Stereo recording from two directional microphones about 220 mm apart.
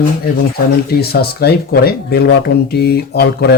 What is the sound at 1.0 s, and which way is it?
Speech, 45° left (ahead or behind).